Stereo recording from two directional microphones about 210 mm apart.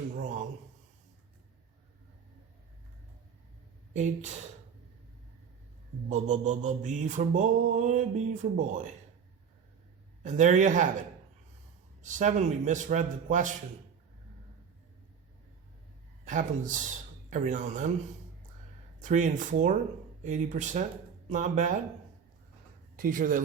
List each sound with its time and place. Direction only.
0.2 s a sound: 35° right (ahead or behind)
3.9 s mantra: 35° right (ahead or behind)
6.1 s mantra: 35° right (ahead or behind)
10.2 s mantra: 35° right (ahead or behind)
12.0 s mantra: 35° right (ahead or behind)
16.2 s speech: 40° right (ahead or behind)
17.2 s mantra: 35° right (ahead or behind)
19.0 s mantra: 35° right (ahead or behind)
21.2 s speech: 35° right (ahead or behind)
23.0 s mantra: 40° right (ahead or behind)